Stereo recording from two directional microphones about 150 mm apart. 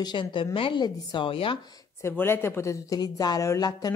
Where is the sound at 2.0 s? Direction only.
15° left (ahead or behind).